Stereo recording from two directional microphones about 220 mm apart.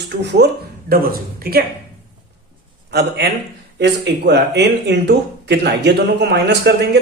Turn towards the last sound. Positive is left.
turn(degrees=-50)  # may be behind; listen again after turning